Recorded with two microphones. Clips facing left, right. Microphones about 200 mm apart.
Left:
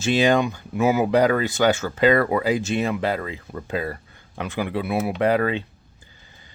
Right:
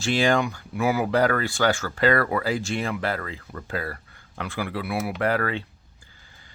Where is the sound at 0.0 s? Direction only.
20° left (ahead or behind).